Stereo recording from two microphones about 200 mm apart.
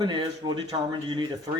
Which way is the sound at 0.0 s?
20° right (ahead or behind).